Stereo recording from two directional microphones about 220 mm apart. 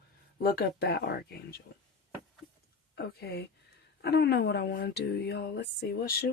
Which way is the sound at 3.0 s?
45° left (ahead or behind).